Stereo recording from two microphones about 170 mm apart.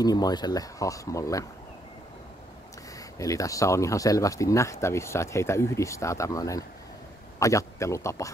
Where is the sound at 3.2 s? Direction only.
20° left (ahead or behind).